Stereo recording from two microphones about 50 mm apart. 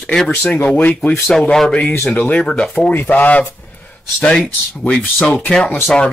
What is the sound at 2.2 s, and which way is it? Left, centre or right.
Speech, left.